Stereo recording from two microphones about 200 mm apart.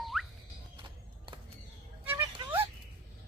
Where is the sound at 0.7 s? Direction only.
25° right (ahead or behind).